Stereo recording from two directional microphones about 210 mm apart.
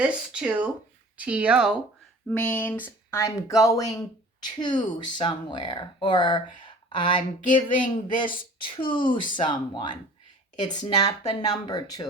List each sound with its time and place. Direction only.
0.0 s speech: 5° right (ahead or behind)
2.5 s speech: 10° left (ahead or behind)
6.6 s a sound: 25° left (ahead or behind)
7.5 s speech: 25° left (ahead or behind)